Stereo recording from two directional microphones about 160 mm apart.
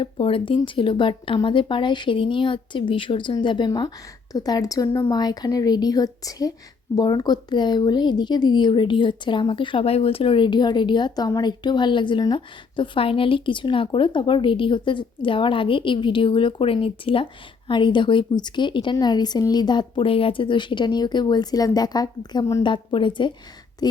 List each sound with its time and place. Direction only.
0.0 s speech: 35° left (ahead or behind)